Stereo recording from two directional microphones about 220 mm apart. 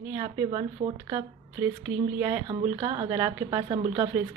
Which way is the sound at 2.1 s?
10° right (ahead or behind).